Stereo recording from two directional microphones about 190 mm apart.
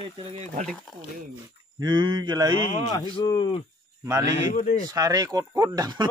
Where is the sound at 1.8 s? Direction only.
25° right (ahead or behind).